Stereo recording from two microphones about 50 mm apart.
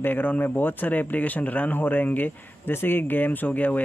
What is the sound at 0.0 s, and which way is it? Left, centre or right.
Speech, left.